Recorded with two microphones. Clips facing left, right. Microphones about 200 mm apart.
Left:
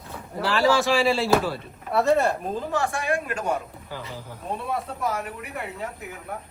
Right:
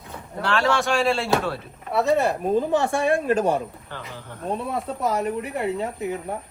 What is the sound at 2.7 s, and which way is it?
Speech, 25° right (ahead or behind).